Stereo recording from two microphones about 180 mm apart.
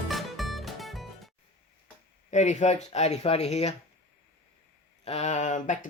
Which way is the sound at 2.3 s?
40° left (ahead or behind).